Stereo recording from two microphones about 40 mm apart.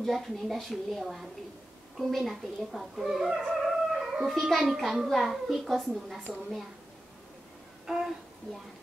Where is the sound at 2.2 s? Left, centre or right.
Centre.